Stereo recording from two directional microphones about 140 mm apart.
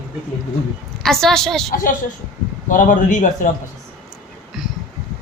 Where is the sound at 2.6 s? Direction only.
70° left (ahead or behind).